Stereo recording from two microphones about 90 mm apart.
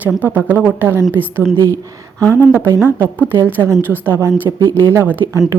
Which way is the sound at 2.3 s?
25° right (ahead or behind).